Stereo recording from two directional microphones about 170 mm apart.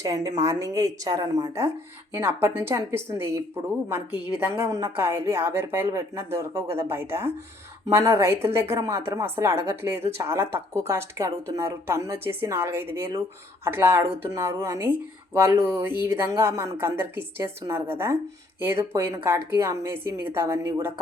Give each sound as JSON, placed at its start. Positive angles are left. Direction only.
{"t": 0.0, "sound": "a woman's voice", "side_deg": -20}